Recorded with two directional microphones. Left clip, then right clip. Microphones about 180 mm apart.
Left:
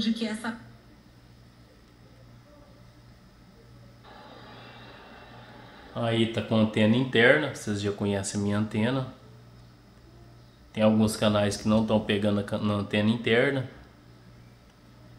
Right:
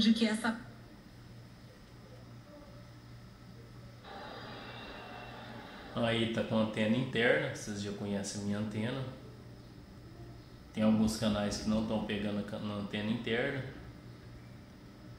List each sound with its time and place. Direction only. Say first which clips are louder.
0.2 s a woman's voice: even; 15° left (ahead or behind)
5.9 s speech: left 5 dB; 50° left (ahead or behind)
10.7 s speech: left 8 dB; 45° left (ahead or behind)